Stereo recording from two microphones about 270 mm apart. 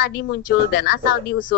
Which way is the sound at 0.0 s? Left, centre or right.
Left.